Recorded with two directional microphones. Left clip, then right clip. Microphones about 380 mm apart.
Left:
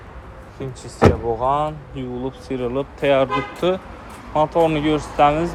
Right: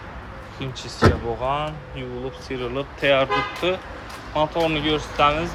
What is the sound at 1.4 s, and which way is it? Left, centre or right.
Speech, centre.